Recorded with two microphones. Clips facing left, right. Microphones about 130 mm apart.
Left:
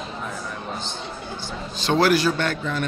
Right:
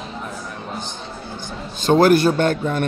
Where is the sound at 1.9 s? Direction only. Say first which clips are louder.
Right 5 dB; 50° right (ahead or behind).